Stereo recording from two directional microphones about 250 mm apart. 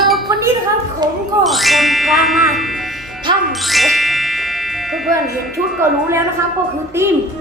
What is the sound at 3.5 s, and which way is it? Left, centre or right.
Music, centre.